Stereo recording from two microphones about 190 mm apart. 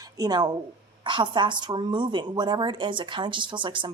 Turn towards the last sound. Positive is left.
turn(degrees=-25)  # may be behind; listen again after turning